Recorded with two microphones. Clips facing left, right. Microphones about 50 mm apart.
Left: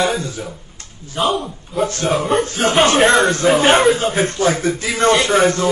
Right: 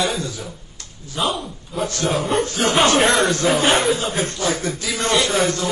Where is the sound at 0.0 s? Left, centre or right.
Left.